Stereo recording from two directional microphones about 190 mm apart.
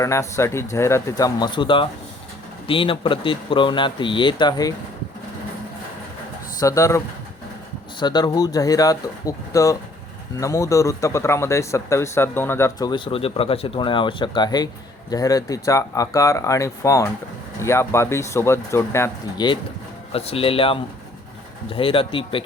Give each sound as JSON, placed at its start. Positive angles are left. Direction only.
{"t": 0.0, "sound": "speech", "side_deg": 15}
{"t": 6.6, "sound": "speech", "side_deg": 15}
{"t": 20.1, "sound": "speech", "side_deg": 30}